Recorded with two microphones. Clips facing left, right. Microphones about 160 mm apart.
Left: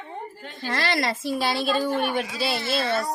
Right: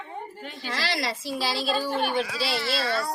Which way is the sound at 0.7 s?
55° left (ahead or behind).